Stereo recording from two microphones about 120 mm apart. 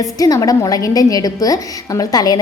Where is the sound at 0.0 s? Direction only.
30° left (ahead or behind).